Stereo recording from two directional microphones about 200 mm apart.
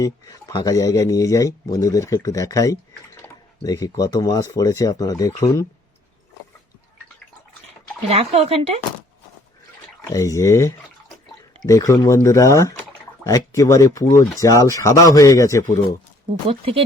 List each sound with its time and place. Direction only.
0.0 s speech: 15° left (ahead or behind)
8.1 s speech: 30° right (ahead or behind)
10.1 s speech: 15° left (ahead or behind)